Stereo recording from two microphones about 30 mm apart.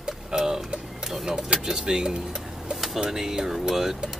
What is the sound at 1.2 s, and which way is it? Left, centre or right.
Speech, centre.